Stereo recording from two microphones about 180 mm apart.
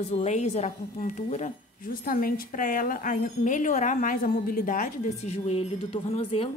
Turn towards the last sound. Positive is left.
turn(degrees=30)  # may be behind; listen again after turning